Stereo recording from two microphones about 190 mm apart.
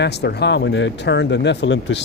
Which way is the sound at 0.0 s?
60° left (ahead or behind).